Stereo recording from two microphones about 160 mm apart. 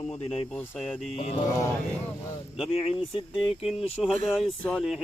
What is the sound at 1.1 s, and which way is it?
Speech, 40° left (ahead or behind).